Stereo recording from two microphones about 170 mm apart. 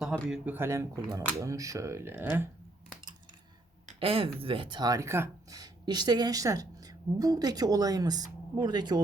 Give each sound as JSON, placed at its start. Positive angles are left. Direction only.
{"t": 0.0, "sound": "speech", "side_deg": -5}
{"t": 4.0, "sound": "speech", "side_deg": -35}